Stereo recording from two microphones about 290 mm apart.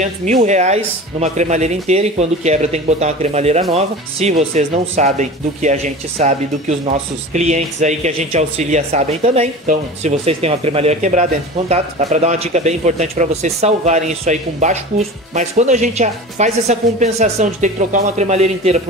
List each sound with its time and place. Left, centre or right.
0.0 s speech: right